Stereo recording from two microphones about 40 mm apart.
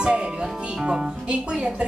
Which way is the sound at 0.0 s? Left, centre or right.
Right.